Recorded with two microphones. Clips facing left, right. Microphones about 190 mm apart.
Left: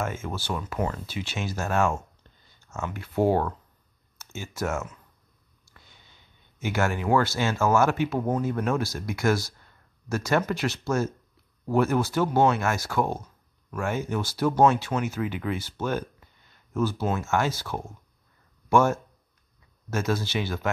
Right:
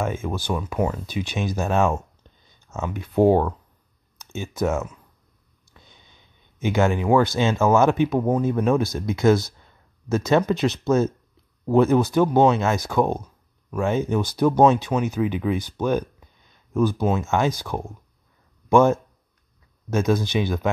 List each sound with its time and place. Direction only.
0.0 s speech: 15° right (ahead or behind)